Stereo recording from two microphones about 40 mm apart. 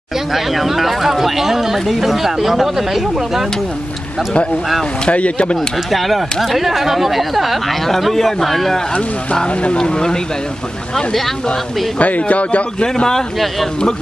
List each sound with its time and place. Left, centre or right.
0.3 s speech: centre
5.0 s speech: left
5.9 s speech: centre
9.5 s speech: left
9.8 s speech: centre
12.0 s speech: left
12.8 s speech: centre